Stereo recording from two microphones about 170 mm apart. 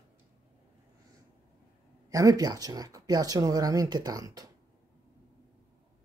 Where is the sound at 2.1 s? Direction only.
20° right (ahead or behind).